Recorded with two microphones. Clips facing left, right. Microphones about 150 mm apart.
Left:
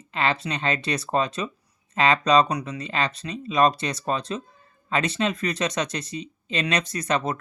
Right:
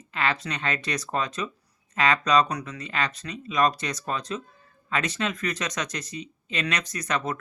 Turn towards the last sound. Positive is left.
turn(degrees=30)  # may be behind; listen again after turning